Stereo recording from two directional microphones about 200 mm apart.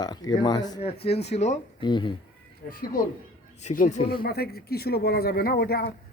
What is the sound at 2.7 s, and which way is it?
Speech, 45° left (ahead or behind).